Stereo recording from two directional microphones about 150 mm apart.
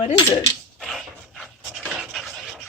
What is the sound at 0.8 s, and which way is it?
Dog, centre (ahead or behind).